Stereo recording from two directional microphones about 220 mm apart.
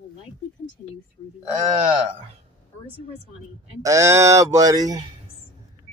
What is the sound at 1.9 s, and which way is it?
Speech, 20° right (ahead or behind).